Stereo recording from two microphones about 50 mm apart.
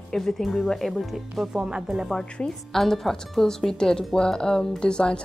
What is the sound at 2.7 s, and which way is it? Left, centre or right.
Speech, centre.